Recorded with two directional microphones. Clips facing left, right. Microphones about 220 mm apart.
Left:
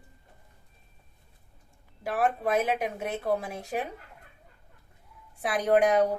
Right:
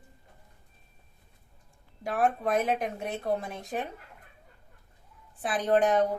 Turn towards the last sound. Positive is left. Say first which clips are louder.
# left 2 dB
turn(degrees=10)  # may be behind; listen again after turning